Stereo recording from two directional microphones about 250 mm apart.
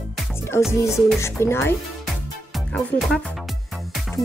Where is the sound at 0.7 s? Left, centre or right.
Centre.